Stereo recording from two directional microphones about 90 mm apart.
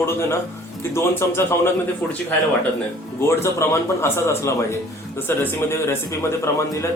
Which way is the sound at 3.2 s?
30° left (ahead or behind).